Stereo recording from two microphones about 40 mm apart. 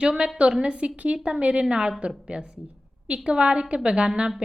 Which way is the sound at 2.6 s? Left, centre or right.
Right.